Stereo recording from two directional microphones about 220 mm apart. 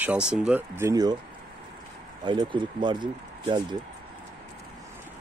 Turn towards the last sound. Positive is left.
turn(degrees=-20)  # may be behind; listen again after turning